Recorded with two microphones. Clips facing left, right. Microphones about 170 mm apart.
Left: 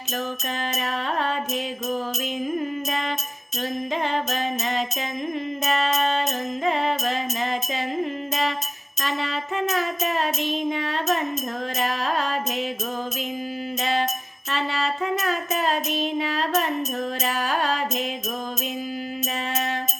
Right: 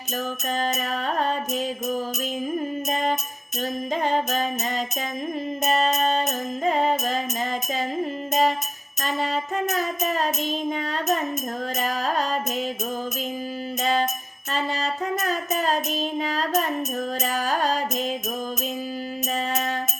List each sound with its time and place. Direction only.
0.2 s music: 45° right (ahead or behind)
13.8 s music: 45° right (ahead or behind)
19.3 s music: 40° right (ahead or behind)